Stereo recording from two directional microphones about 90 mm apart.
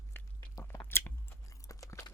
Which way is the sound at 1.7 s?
35° left (ahead or behind).